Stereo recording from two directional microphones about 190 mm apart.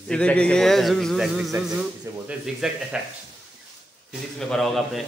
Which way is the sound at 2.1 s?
15° right (ahead or behind).